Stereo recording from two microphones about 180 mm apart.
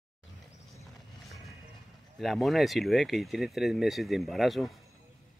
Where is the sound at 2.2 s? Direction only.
Centre (ahead or behind).